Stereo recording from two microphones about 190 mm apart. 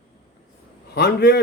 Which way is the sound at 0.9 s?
60° left (ahead or behind).